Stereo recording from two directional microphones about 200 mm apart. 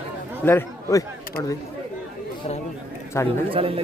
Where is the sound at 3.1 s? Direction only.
15° left (ahead or behind).